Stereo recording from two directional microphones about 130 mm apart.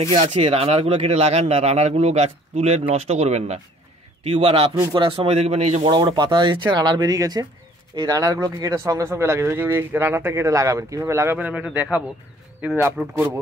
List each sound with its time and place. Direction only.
0.2 s speech: 55° right (ahead or behind)
4.2 s speech: 45° right (ahead or behind)
5.9 s speech: 35° right (ahead or behind); by 13.3 s 10° right (ahead or behind)